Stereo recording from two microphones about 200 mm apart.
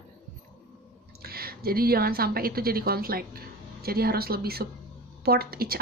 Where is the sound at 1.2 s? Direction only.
50° right (ahead or behind).